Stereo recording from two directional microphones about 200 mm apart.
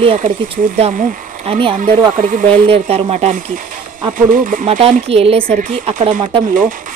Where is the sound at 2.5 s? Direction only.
30° right (ahead or behind).